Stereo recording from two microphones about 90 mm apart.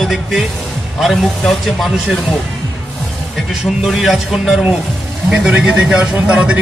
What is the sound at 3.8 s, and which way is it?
A man's voice, 5° right (ahead or behind).